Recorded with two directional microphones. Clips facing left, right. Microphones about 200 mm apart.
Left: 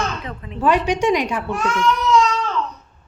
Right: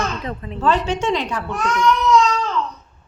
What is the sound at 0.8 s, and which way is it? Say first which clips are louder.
Speech: left 3 dB; 15° left (ahead or behind).